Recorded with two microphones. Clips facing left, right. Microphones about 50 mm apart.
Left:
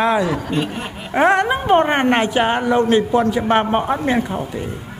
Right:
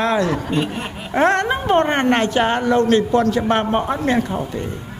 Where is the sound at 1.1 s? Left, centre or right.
Centre.